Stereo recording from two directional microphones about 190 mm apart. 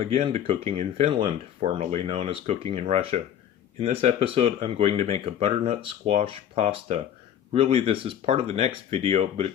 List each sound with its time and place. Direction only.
0.0 s speech: 30° right (ahead or behind)